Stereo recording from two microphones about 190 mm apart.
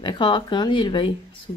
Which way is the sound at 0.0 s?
25° left (ahead or behind).